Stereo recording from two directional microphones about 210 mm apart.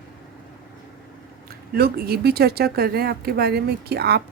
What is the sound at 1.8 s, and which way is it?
Speech, 45° right (ahead or behind).